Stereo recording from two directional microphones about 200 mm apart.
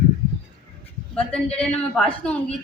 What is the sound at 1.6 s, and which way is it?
Speech, 5° left (ahead or behind).